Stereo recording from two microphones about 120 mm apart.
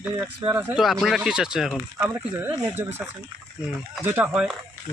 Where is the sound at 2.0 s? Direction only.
15° right (ahead or behind).